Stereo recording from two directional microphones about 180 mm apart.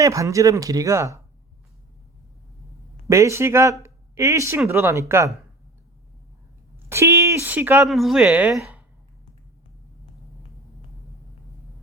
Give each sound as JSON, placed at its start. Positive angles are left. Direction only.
{"t": 0.0, "sound": "speech", "side_deg": -15}
{"t": 3.1, "sound": "speech", "side_deg": -15}
{"t": 3.8, "sound": "a sound", "side_deg": -15}
{"t": 4.7, "sound": "speech", "side_deg": -15}
{"t": 6.8, "sound": "a sound", "side_deg": -15}
{"t": 7.9, "sound": "speech", "side_deg": 0}